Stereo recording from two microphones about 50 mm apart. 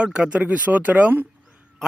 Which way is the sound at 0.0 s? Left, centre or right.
Right.